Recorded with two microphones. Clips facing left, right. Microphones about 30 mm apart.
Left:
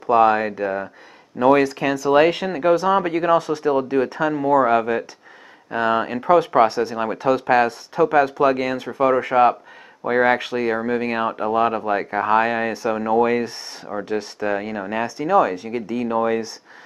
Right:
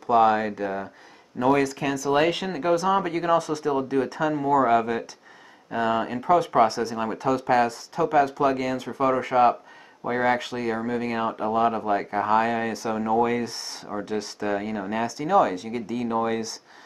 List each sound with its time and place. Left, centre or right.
0.0 s speech: left
2.7 s speech: left